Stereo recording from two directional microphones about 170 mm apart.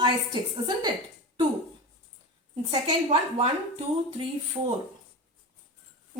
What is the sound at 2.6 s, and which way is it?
Speech, 40° right (ahead or behind).